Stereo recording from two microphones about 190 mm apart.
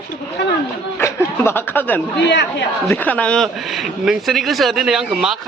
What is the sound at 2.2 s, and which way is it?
Speech, 65° left (ahead or behind).